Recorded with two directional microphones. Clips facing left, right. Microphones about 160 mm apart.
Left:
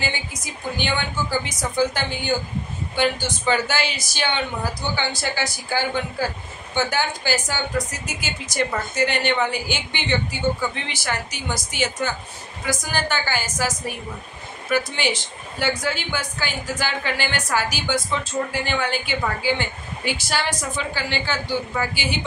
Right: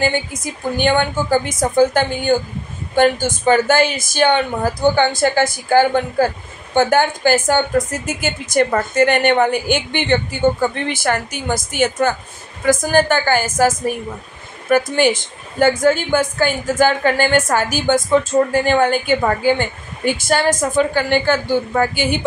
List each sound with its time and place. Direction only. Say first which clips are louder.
0.0 s speech: right 10 dB; 50° right (ahead or behind)